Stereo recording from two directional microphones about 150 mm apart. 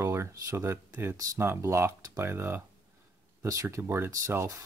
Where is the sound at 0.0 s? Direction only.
15° right (ahead or behind).